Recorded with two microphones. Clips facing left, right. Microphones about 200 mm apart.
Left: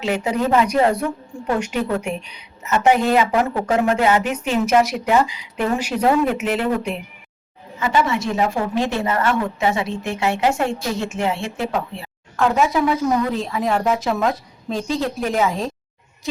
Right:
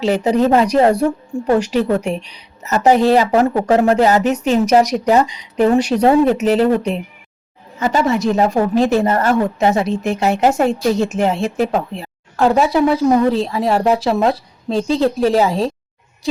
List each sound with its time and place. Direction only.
0.0 s a woman's voice: 35° right (ahead or behind)